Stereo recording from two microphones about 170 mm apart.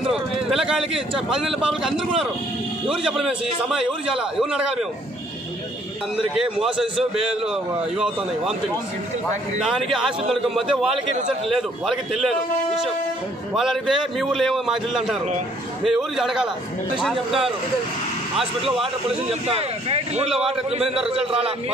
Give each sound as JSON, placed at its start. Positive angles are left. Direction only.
{"t": 0.0, "sound": "a man's voice", "side_deg": -5}
{"t": 6.3, "sound": "a man's voice", "side_deg": -5}
{"t": 9.6, "sound": "a man's voice", "side_deg": 0}
{"t": 19.4, "sound": "a man's voice", "side_deg": -35}